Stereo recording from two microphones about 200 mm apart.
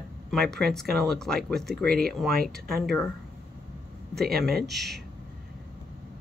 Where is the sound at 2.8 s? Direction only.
Centre (ahead or behind).